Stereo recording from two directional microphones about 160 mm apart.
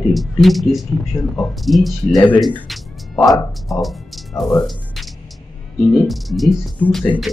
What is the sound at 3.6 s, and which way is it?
Music, centre (ahead or behind).